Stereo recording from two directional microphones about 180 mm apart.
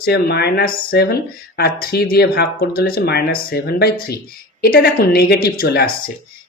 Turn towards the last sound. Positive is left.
turn(degrees=60)  # may be behind; listen again after turning